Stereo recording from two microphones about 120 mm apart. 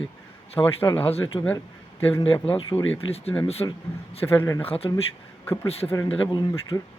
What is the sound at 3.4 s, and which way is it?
Speech, 55° left (ahead or behind).